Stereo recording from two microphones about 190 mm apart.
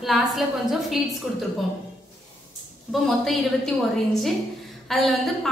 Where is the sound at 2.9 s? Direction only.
Centre (ahead or behind).